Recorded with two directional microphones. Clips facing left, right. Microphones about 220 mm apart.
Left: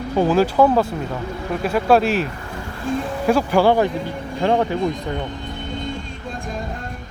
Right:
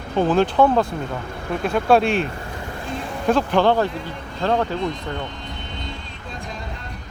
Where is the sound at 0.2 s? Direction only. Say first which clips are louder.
Left 1 dB; 5° left (ahead or behind).